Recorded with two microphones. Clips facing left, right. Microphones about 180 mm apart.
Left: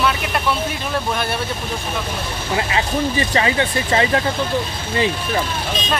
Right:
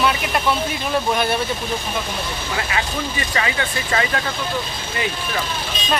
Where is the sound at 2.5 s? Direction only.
30° left (ahead or behind).